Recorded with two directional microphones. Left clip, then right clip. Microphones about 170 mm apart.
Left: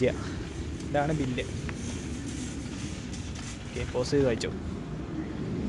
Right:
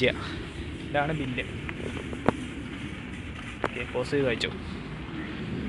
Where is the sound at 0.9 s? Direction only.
30° left (ahead or behind).